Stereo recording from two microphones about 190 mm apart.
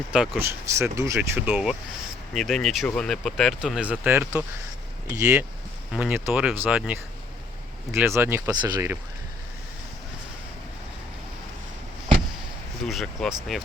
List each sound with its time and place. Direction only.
0.1 s speech: 10° right (ahead or behind)
12.8 s speech: centre (ahead or behind)